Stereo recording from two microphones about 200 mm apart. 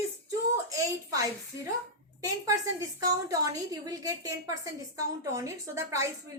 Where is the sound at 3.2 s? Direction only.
15° right (ahead or behind).